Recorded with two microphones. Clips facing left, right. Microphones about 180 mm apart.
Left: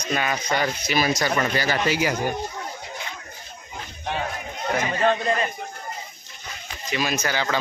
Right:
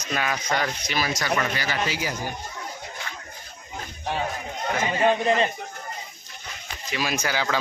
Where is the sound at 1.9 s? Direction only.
75° left (ahead or behind).